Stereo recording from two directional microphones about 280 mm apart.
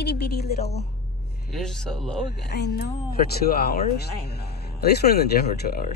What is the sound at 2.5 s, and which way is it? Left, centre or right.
Speech, left.